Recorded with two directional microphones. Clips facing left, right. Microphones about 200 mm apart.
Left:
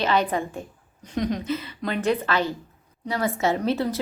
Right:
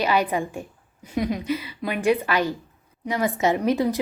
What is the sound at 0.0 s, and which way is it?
A woman's voice, 10° right (ahead or behind).